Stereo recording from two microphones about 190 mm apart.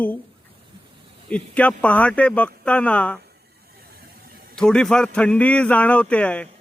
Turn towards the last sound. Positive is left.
turn(degrees=5)  # may be behind; listen again after turning